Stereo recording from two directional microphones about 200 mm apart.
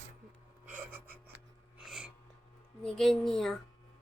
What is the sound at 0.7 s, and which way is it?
Gasp, 10° right (ahead or behind).